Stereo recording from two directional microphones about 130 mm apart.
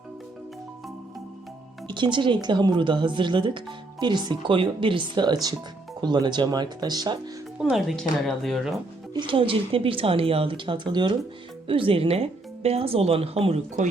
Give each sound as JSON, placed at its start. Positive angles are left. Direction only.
{"t": 1.9, "sound": "speech", "side_deg": -35}
{"t": 7.6, "sound": "speech", "side_deg": -5}
{"t": 9.1, "sound": "speech", "side_deg": -40}